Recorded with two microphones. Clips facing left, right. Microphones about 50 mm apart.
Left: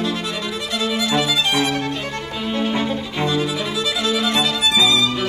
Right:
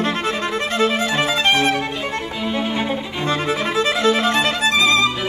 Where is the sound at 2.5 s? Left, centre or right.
Centre.